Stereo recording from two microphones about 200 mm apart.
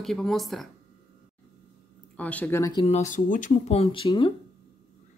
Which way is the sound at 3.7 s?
30° left (ahead or behind).